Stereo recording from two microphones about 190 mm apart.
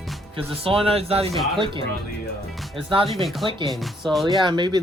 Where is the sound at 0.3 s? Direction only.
30° right (ahead or behind).